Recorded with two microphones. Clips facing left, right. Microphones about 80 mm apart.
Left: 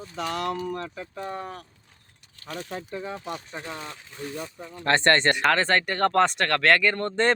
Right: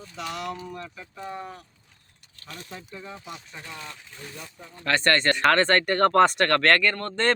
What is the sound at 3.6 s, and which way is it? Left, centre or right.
Speech, left.